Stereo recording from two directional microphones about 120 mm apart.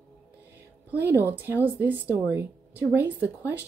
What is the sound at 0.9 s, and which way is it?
A woman's voice, 15° right (ahead or behind).